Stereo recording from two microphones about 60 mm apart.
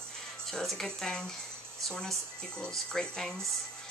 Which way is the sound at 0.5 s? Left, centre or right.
Centre.